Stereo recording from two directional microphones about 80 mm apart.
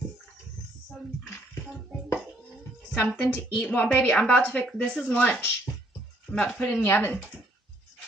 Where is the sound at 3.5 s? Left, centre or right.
Centre.